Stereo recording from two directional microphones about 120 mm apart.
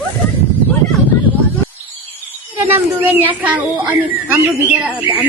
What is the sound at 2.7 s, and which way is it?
Speech, 15° right (ahead or behind).